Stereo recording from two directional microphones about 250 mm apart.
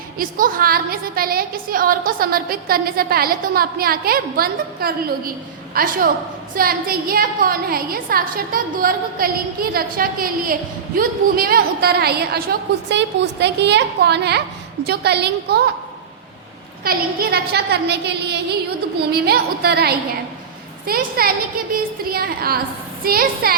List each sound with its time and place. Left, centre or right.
0.2 s a woman's voice: right
16.8 s a woman's voice: right